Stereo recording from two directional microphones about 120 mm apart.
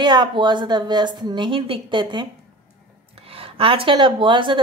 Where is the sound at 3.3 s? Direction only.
50° right (ahead or behind).